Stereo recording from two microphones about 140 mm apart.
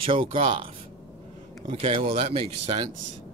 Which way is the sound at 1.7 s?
40° right (ahead or behind).